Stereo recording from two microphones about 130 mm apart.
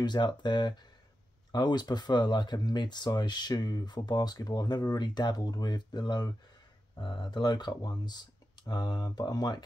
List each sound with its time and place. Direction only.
0.0 s speech: 35° left (ahead or behind)